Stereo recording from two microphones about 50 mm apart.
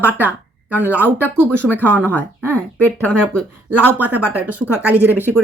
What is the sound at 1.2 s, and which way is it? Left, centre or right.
Speech, left.